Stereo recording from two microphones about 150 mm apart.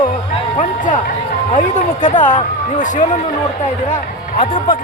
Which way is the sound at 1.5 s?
55° left (ahead or behind).